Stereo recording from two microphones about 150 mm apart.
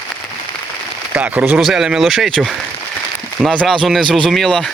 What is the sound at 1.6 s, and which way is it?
Speech, 5° right (ahead or behind).